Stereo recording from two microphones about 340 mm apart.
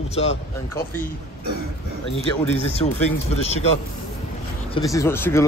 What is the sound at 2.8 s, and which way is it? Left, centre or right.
Speech, centre.